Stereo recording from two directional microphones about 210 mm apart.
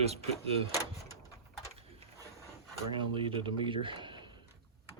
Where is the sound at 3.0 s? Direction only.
25° right (ahead or behind).